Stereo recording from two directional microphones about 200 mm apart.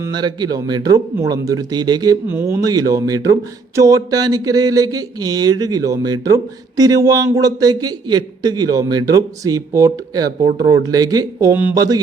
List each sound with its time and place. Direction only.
0.0 s speech: 20° right (ahead or behind)